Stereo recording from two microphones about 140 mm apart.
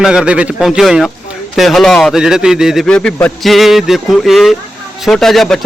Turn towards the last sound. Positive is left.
turn(degrees=0)  # may be behind; listen again after turning